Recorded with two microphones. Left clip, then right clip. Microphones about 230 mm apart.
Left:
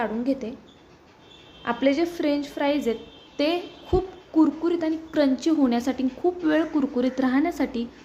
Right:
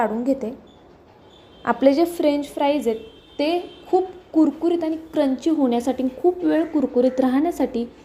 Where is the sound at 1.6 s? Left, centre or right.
Centre.